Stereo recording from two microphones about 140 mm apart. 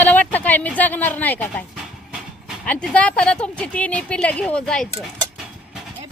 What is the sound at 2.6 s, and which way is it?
A woman's voice, 10° left (ahead or behind).